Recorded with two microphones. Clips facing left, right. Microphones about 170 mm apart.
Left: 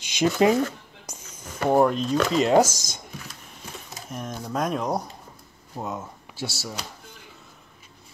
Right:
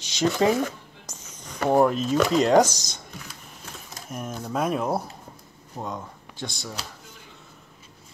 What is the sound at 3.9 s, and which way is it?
Typewriter, centre (ahead or behind).